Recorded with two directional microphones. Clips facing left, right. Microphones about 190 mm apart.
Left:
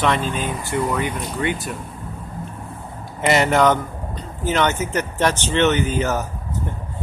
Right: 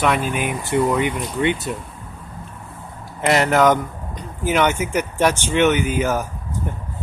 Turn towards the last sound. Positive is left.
turn(degrees=-10)  # may be behind; listen again after turning